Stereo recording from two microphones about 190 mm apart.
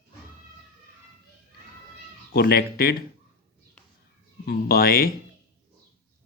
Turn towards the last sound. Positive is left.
turn(degrees=50)  # may be behind; listen again after turning